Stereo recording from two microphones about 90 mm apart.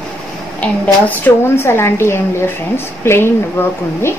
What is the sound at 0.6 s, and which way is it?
Speech, 20° left (ahead or behind).